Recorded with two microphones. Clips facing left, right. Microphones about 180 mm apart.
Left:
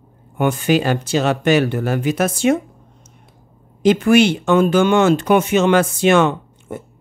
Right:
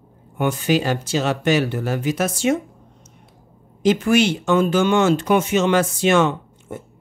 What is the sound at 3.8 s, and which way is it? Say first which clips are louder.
Speech: left 4 dB; 60° left (ahead or behind).